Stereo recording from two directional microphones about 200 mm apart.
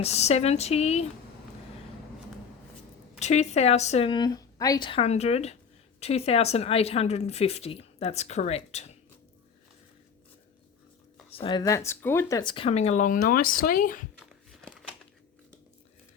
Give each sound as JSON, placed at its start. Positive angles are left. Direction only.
{"t": 0.0, "sound": "speech", "side_deg": 35}
{"t": 3.2, "sound": "speech", "side_deg": 35}
{"t": 11.3, "sound": "speech", "side_deg": 25}